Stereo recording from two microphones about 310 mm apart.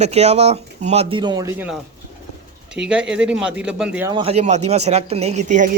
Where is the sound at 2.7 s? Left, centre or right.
Centre.